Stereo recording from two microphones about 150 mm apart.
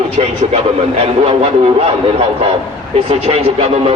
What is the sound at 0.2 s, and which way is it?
A man's voice, 50° right (ahead or behind).